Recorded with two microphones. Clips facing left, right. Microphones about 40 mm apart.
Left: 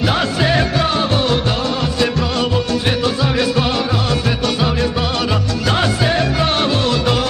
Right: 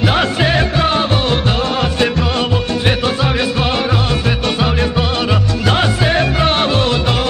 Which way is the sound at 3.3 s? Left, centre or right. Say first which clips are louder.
Even; right.